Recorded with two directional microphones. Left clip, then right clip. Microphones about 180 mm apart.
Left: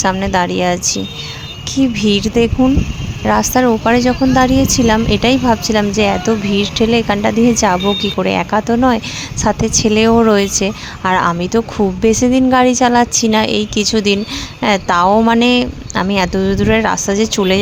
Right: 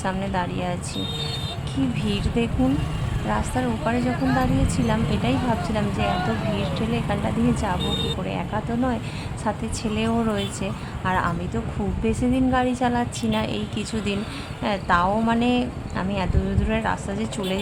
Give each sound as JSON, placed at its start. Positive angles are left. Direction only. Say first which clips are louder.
{"t": 0.0, "sound": "a woman's voice", "louder": "left 12 dB", "side_deg": 45}